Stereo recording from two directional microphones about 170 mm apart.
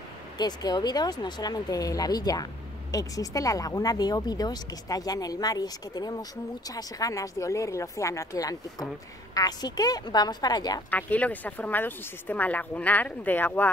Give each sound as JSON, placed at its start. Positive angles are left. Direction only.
{"t": 0.4, "sound": "speech", "side_deg": 25}
{"t": 10.9, "sound": "speech", "side_deg": 10}